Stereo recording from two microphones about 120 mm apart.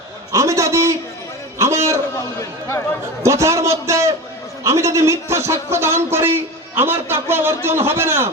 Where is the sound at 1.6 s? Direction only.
25° right (ahead or behind).